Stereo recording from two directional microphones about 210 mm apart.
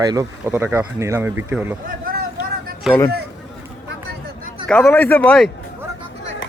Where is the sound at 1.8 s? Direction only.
45° right (ahead or behind).